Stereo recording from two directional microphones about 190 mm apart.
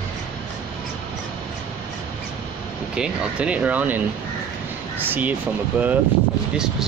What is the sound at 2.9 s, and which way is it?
Speech, 5° right (ahead or behind).